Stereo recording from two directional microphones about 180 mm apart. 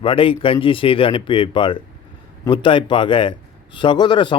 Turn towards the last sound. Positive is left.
turn(degrees=25)  # may be behind; listen again after turning